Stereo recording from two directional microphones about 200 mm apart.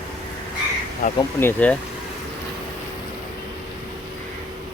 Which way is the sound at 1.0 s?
40° left (ahead or behind).